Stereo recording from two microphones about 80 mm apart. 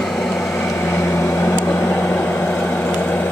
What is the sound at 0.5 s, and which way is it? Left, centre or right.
Microwave oven, left.